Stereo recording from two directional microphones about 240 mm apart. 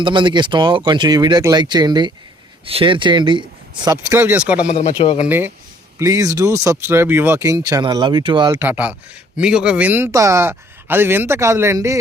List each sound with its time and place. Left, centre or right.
0.0 s speech: centre
4.7 s speech: left
6.0 s speech: centre
8.5 s speech: centre